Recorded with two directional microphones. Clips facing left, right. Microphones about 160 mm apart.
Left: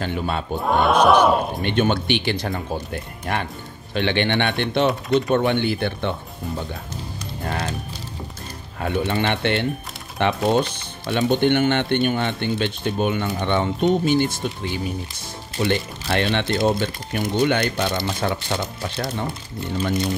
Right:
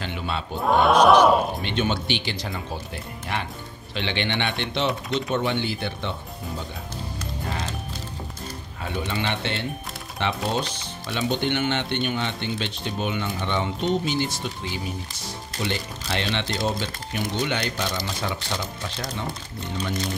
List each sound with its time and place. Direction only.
0.0 s speech: 45° left (ahead or behind)
0.6 s speech: centre (ahead or behind)
1.6 s speech: 55° left (ahead or behind)
8.8 s speech: 55° left (ahead or behind)